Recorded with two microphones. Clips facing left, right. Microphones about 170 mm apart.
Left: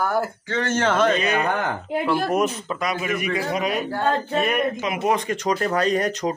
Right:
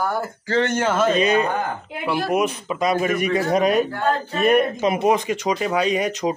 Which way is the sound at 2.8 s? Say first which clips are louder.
Right 6 dB; 35° right (ahead or behind).